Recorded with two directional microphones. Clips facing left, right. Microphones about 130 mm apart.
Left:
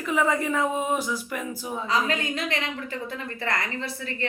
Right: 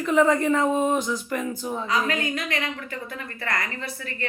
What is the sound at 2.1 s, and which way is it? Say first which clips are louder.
A woman's voice: even; 25° left (ahead or behind).